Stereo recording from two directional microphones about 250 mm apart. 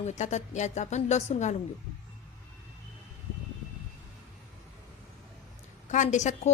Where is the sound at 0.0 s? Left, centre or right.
Left.